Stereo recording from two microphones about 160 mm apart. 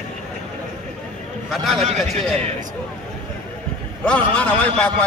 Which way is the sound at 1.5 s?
Centre (ahead or behind).